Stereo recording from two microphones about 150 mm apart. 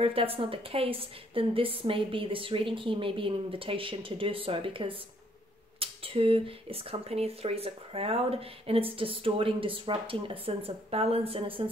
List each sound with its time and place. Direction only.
0.0 s speech: 40° right (ahead or behind)